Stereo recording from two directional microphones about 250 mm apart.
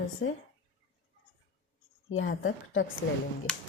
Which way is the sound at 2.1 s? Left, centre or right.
Left.